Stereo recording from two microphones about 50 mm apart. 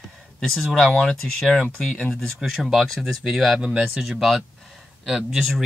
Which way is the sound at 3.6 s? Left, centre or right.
Centre.